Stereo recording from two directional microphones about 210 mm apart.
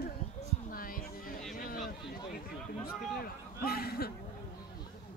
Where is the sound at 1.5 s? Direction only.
40° left (ahead or behind).